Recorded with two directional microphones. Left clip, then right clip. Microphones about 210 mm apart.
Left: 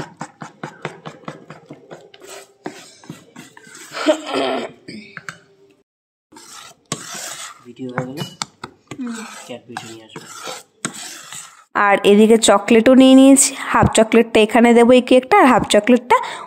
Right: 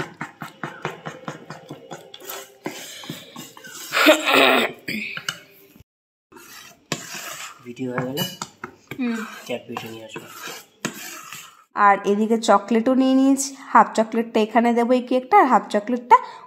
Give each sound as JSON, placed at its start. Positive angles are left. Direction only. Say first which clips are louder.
{"t": 3.9, "sound": "a sound", "louder": "right 4 dB", "side_deg": 0}
{"t": 9.5, "sound": "dishes", "louder": "right 4 dB", "side_deg": -10}
{"t": 11.7, "sound": "speech", "louder": "left 4 dB", "side_deg": 40}